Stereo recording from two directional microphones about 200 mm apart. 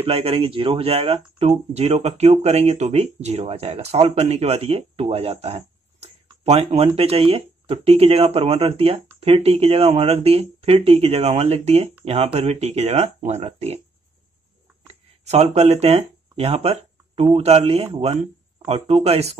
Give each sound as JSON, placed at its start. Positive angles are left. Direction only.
{"t": 0.0, "sound": "speech", "side_deg": -30}
{"t": 15.2, "sound": "speech", "side_deg": -35}